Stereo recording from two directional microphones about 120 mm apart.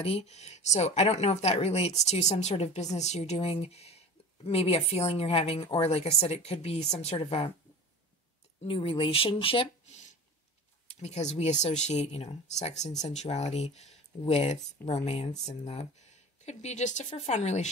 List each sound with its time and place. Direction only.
0.0 s speech: 60° left (ahead or behind)
8.6 s speech: 50° left (ahead or behind)
11.0 s speech: 70° left (ahead or behind)